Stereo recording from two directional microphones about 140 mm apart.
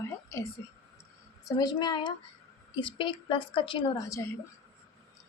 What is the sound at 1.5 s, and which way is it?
A woman's voice, 30° left (ahead or behind).